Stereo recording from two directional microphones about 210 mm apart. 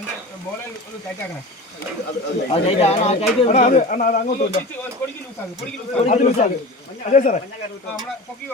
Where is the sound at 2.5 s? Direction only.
30° left (ahead or behind).